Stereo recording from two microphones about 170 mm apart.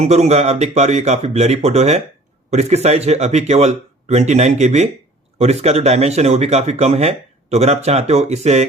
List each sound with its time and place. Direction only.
0.0 s speech: 40° right (ahead or behind)